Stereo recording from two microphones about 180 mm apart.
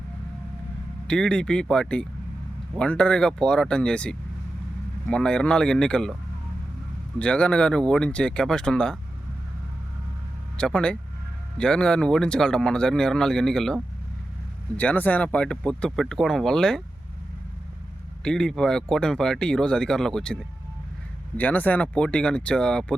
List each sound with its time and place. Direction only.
1.0 s speech: 5° left (ahead or behind)
7.2 s speech: 5° left (ahead or behind)
10.6 s speech: 5° left (ahead or behind)
14.8 s speech: 10° left (ahead or behind)
18.2 s speech: 5° left (ahead or behind)